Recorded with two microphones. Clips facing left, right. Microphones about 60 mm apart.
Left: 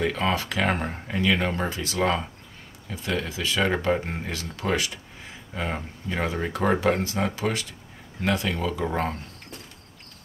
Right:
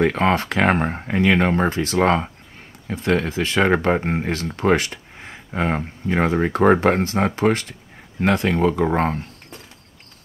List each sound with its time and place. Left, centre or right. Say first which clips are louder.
0.0 s speech: right 7 dB; right